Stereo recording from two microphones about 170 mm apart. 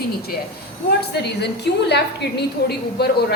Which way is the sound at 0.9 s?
75° left (ahead or behind).